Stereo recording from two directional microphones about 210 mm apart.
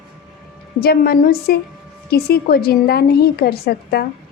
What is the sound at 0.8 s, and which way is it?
A woman's voice, 45° left (ahead or behind).